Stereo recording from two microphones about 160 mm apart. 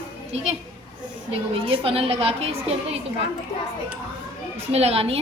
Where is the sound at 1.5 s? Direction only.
35° right (ahead or behind).